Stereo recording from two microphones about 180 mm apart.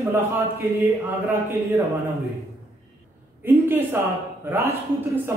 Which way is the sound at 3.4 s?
10° right (ahead or behind).